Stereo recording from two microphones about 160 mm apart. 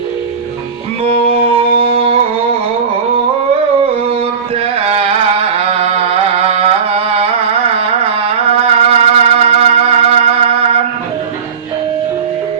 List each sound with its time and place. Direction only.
1.0 s music: 40° right (ahead or behind)
4.9 s a sound: 40° right (ahead or behind)
5.7 s carnatic music: 40° right (ahead or behind)
8.6 s music: 40° right (ahead or behind)